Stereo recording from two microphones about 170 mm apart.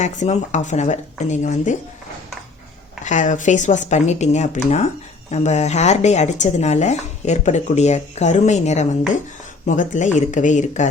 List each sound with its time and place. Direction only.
0.0 s speech: 45° left (ahead or behind)
3.0 s speech: 45° left (ahead or behind)